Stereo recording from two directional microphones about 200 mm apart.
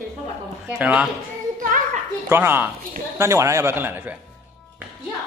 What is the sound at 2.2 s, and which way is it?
A man's voice, 10° right (ahead or behind).